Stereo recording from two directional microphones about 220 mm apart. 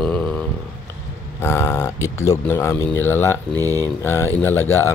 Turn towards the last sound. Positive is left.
turn(degrees=10)  # may be behind; listen again after turning